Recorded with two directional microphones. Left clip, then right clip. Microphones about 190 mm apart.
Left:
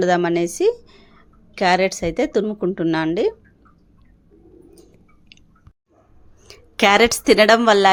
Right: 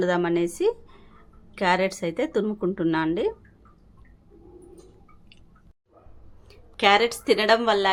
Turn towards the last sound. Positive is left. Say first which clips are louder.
# left 8 dB
turn(degrees=40)  # may be behind; listen again after turning